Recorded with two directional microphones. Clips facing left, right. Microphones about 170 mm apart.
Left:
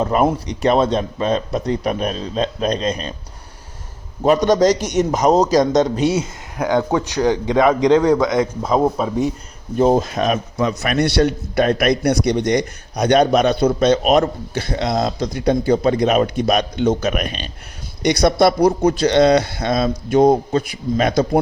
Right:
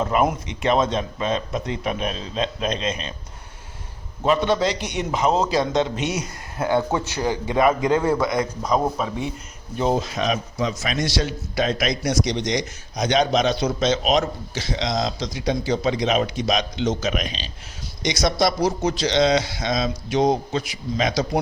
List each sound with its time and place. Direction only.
0.0 s speech: 40° left (ahead or behind)
4.2 s speech: 40° left (ahead or behind)
6.6 s a man's voice: 15° left (ahead or behind)
9.7 s a man's voice: 45° left (ahead or behind)